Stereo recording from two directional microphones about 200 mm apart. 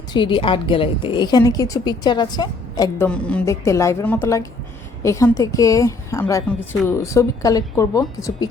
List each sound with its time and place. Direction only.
0.1 s a woman's voice: 25° left (ahead or behind)
3.1 s a woman's voice: 5° left (ahead or behind)